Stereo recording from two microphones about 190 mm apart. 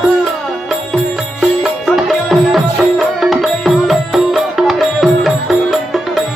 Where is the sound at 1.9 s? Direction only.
Centre (ahead or behind).